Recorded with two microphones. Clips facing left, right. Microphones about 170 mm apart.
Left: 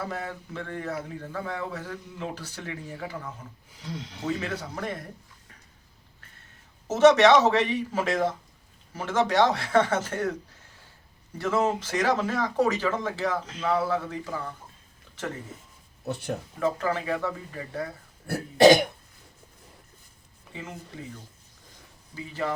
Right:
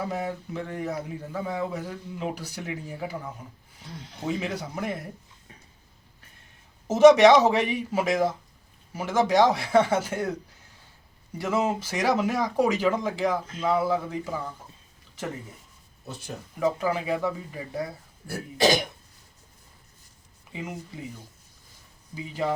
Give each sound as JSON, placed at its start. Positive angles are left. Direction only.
{"t": 0.0, "sound": "speech", "side_deg": -15}
{"t": 3.8, "sound": "speech", "side_deg": 90}
{"t": 4.3, "sound": "speech", "side_deg": -15}
{"t": 6.8, "sound": "speech", "side_deg": -10}
{"t": 11.3, "sound": "speech", "side_deg": -10}
{"t": 16.0, "sound": "cough", "side_deg": 60}
{"t": 16.6, "sound": "speech", "side_deg": -15}
{"t": 18.3, "sound": "cough", "side_deg": 60}
{"t": 20.5, "sound": "speech", "side_deg": -10}
{"t": 22.1, "sound": "speech", "side_deg": -15}